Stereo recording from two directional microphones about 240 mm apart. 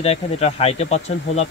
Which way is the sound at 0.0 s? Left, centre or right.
Left.